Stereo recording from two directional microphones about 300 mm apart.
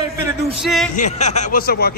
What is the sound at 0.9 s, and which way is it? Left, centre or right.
Speech, left.